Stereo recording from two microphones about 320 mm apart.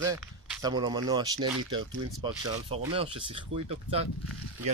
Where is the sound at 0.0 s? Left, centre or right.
Centre.